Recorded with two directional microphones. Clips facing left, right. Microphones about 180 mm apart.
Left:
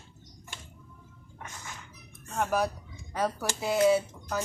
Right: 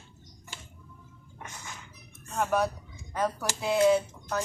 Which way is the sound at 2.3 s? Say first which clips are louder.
Right 1 dB; centre (ahead or behind).